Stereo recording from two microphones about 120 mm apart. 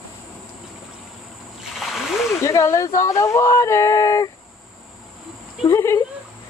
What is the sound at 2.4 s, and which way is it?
Speech, 25° left (ahead or behind).